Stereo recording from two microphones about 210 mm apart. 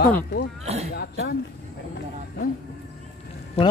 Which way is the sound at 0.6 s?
30° right (ahead or behind).